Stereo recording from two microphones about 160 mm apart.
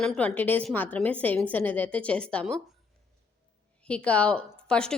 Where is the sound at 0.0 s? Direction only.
5° left (ahead or behind).